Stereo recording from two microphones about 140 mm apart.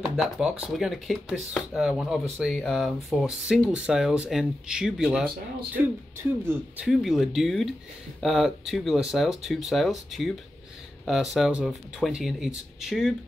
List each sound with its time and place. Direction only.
0.0 s speech: 5° right (ahead or behind)
6.4 s speech: 15° right (ahead or behind)
6.9 s speech: centre (ahead or behind)